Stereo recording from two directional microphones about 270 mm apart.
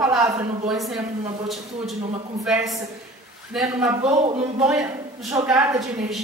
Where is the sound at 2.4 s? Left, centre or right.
Centre.